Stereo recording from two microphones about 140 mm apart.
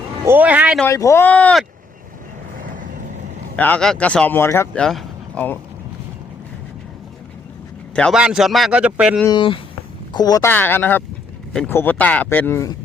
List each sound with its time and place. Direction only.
0.3 s speech: 10° right (ahead or behind)
0.9 s speech: 20° left (ahead or behind)
2.6 s vehicle: 80° right
3.5 s speech: 10° left (ahead or behind)
4.8 s speech: 5° left (ahead or behind)
8.1 s a man's voice: 5° right (ahead or behind)
10.1 s speech: 30° left (ahead or behind)
10.5 s speech: 15° left (ahead or behind)